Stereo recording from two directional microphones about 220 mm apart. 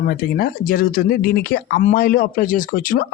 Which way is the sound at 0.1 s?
40° left (ahead or behind).